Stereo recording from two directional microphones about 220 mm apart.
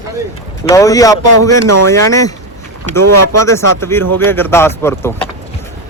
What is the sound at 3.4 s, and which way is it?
Speech, 10° left (ahead or behind).